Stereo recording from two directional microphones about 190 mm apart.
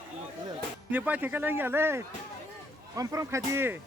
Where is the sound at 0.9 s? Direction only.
10° right (ahead or behind).